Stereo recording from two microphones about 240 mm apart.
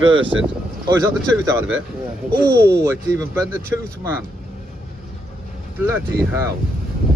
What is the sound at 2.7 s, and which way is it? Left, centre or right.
Speech, centre.